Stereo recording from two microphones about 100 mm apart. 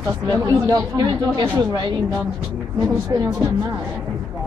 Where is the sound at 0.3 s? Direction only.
35° right (ahead or behind).